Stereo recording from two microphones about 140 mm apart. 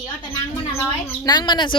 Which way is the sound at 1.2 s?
30° left (ahead or behind).